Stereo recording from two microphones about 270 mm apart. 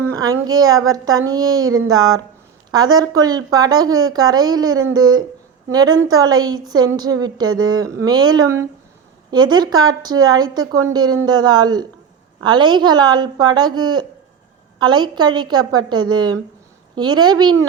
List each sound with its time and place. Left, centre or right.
0.0 s a woman's voice: centre